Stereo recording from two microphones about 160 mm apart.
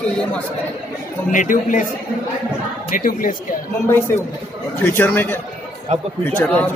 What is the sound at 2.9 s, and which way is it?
Speech, 60° left (ahead or behind).